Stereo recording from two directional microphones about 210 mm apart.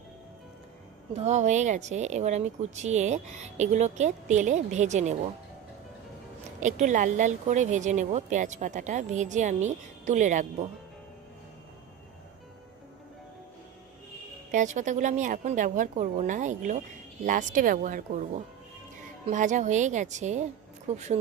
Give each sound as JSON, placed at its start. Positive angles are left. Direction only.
{"t": 1.1, "sound": "speech", "side_deg": -30}
{"t": 6.6, "sound": "speech", "side_deg": -35}
{"t": 14.5, "sound": "speech", "side_deg": -35}